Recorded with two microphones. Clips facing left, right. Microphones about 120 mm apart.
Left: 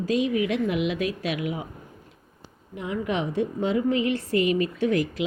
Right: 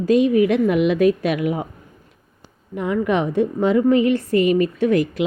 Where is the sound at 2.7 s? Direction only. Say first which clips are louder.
Right 8 dB; 55° right (ahead or behind).